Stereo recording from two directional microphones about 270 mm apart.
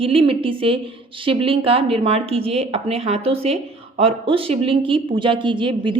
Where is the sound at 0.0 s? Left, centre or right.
Centre.